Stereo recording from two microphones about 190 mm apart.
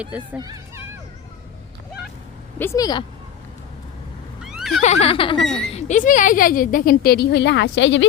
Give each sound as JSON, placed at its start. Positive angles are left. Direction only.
{"t": 0.0, "sound": "speech", "side_deg": -5}
{"t": 2.6, "sound": "speech", "side_deg": 15}
{"t": 4.4, "sound": "neigh", "side_deg": -5}
{"t": 4.8, "sound": "speech", "side_deg": 35}